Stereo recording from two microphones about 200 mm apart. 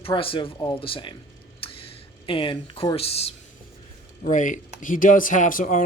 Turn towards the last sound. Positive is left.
turn(degrees=40)  # may be behind; listen again after turning